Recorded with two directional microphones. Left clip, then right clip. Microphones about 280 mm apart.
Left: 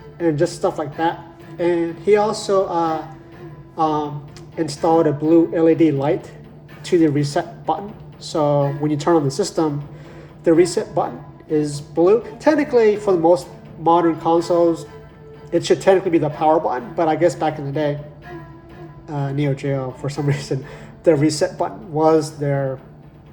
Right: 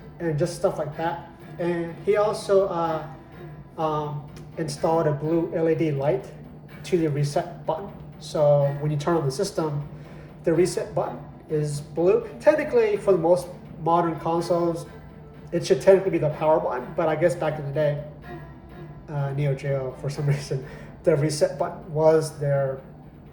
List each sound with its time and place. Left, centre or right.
0.2 s a man's voice: left
19.0 s a man's voice: left
21.0 s a man's voice: left